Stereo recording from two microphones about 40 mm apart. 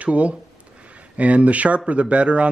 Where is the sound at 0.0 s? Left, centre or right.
Right.